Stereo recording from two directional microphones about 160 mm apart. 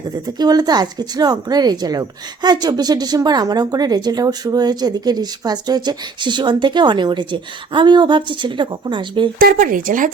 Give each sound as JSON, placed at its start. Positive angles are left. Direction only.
{"t": 0.3, "sound": "speech", "side_deg": -25}
{"t": 9.4, "sound": "speech", "side_deg": -65}